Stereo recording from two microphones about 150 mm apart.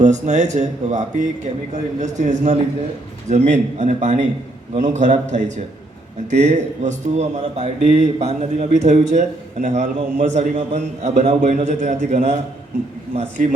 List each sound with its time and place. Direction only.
0.0 s a man's voice: 55° right (ahead or behind)